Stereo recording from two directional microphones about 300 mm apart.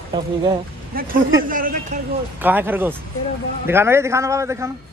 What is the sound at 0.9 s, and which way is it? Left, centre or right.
Speech, right.